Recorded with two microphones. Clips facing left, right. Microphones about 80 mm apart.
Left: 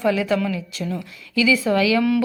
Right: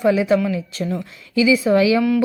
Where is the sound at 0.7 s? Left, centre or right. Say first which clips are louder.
Right 3 dB; right.